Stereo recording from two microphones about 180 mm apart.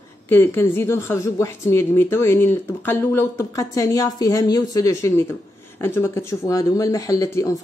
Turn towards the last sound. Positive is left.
turn(degrees=20)  # may be behind; listen again after turning